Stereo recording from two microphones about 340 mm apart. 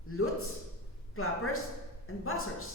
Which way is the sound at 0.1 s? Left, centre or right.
Left.